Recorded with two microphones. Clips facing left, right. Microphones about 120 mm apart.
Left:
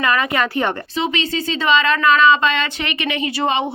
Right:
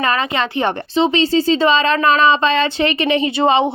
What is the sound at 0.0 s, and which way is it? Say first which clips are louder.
Speech: even; 30° right (ahead or behind).